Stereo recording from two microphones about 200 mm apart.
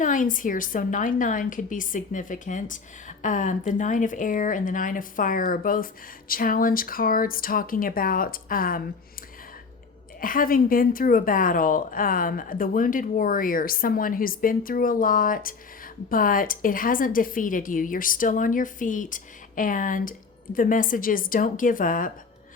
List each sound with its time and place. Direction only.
0.0 s a woman's voice: 40° left (ahead or behind)
10.2 s a woman's voice: 45° left (ahead or behind)